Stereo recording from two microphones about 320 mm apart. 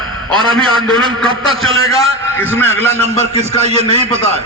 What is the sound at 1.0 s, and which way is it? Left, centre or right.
Speech, centre.